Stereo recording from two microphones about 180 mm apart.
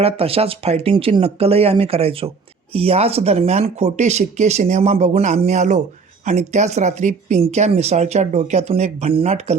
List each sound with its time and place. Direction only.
0.0 s speech: 35° right (ahead or behind)